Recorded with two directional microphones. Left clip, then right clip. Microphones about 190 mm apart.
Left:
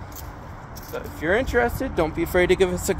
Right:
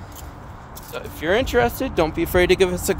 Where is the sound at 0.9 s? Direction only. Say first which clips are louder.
Right 2 dB; 5° right (ahead or behind).